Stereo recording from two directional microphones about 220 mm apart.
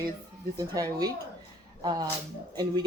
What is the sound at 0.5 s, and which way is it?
Speech, 15° right (ahead or behind).